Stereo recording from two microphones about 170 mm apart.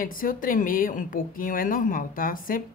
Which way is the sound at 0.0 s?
55° left (ahead or behind).